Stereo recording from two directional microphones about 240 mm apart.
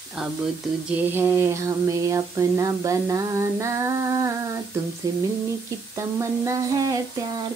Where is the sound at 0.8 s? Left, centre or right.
Centre.